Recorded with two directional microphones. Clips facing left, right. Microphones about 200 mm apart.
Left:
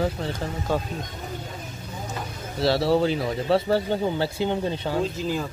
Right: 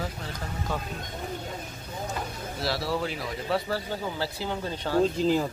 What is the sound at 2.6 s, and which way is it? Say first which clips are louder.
Speech: left 9 dB; 25° left (ahead or behind).